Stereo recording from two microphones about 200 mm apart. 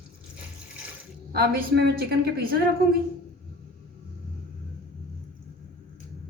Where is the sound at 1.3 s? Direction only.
55° right (ahead or behind).